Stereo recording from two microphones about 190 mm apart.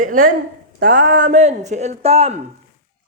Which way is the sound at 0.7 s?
50° right (ahead or behind).